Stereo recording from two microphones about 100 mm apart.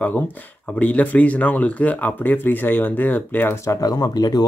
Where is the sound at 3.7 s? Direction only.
35° left (ahead or behind).